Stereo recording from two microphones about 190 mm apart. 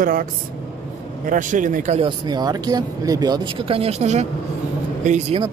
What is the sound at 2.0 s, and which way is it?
Speech, 20° right (ahead or behind).